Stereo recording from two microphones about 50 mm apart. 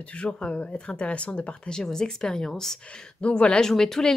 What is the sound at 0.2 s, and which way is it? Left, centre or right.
Speech, left.